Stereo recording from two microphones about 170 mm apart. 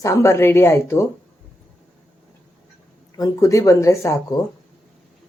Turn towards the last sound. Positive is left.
turn(degrees=15)  # may be behind; listen again after turning